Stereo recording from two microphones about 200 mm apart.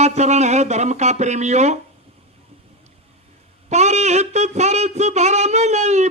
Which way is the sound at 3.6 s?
35° right (ahead or behind).